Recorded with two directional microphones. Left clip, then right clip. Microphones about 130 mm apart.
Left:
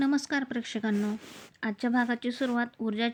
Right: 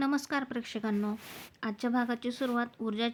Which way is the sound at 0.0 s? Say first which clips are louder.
Left 3 dB; 30° left (ahead or behind).